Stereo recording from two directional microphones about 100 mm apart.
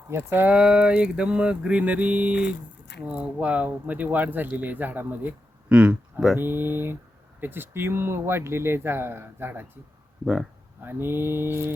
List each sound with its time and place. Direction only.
0.1 s speech: 20° right (ahead or behind)
0.5 s speech: 10° right (ahead or behind)
6.3 s speech: 20° right (ahead or behind)
10.8 s speech: 20° right (ahead or behind)